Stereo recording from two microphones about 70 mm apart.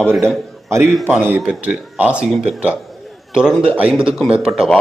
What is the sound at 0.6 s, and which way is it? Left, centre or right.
Speech, right.